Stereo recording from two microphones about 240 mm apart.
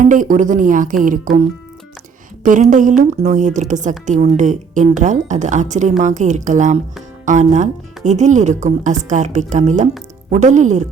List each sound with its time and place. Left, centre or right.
0.0 s a woman's voice: right
2.4 s a woman's voice: right